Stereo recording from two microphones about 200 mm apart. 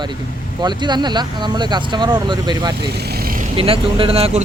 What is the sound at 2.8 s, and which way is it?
Vehicle, 50° right (ahead or behind).